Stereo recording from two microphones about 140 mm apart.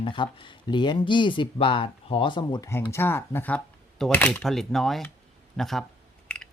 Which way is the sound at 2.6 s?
20° left (ahead or behind).